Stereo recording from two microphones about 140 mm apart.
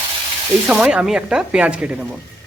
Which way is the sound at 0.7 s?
5° right (ahead or behind).